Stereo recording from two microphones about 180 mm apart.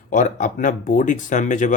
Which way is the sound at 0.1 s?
45° left (ahead or behind).